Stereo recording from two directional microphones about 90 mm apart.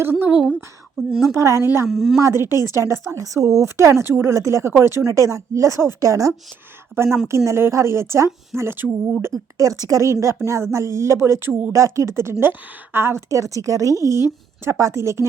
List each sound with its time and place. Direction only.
0.0 s speech: 25° right (ahead or behind)
0.3 s speech: 5° right (ahead or behind)
1.2 s a woman's voice: 35° right (ahead or behind)
1.9 s speech: centre (ahead or behind)
2.2 s a woman's voice: 30° right (ahead or behind)
9.2 s a woman's voice: 40° right (ahead or behind)